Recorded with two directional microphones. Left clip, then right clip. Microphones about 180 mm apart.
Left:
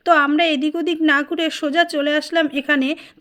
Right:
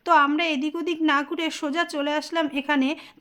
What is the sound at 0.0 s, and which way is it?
A woman's voice, 15° left (ahead or behind).